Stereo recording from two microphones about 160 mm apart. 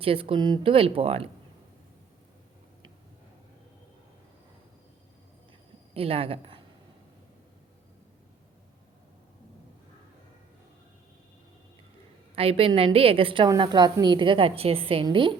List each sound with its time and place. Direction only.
0.0 s a woman's voice: 35° right (ahead or behind)
5.9 s a woman's voice: 35° right (ahead or behind)
12.4 s a woman's voice: 35° right (ahead or behind)